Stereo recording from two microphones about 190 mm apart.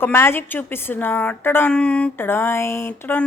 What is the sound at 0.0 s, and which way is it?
A woman's voice, 10° left (ahead or behind).